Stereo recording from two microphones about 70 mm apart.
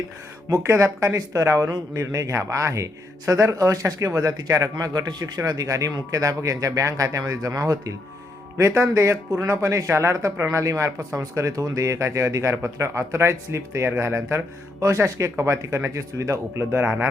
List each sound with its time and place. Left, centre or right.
0.5 s speech: right
5.4 s speech: right
8.5 s speech: right